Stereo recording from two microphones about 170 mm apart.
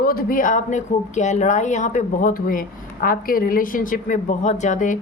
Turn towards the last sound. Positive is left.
turn(degrees=50)  # may be behind; listen again after turning